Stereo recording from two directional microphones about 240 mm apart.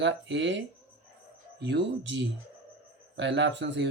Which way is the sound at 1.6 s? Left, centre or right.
Right.